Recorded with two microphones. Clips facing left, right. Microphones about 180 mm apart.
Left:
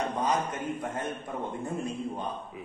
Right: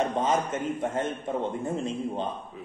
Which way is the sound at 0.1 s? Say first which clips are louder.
Right 3 dB; 25° right (ahead or behind).